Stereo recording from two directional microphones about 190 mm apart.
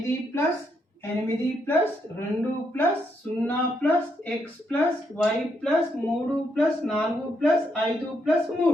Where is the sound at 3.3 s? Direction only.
10° left (ahead or behind).